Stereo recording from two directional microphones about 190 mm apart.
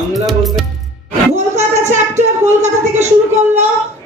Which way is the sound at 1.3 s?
35° right (ahead or behind).